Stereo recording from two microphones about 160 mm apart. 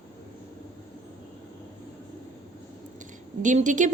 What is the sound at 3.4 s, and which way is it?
Speech, 50° right (ahead or behind).